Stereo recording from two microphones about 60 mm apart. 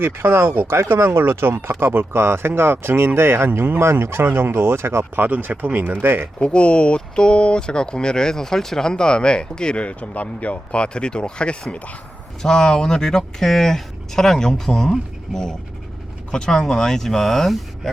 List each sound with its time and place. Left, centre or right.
0.0 s speech: right
6.4 s speech: centre